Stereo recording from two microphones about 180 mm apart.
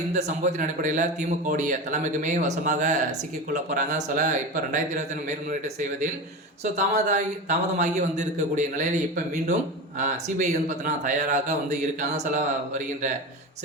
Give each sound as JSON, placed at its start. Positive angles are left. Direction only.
{"t": 0.1, "sound": "a man's voice", "side_deg": -40}
{"t": 6.7, "sound": "a man's voice", "side_deg": -40}